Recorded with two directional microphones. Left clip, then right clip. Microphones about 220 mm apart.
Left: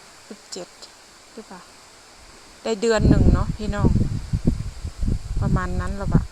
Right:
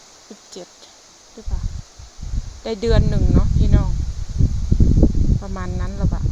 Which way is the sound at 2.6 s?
5° right (ahead or behind).